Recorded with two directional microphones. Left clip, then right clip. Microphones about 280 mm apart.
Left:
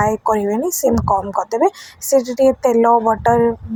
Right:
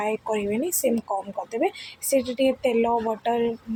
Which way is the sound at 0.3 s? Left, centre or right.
Centre.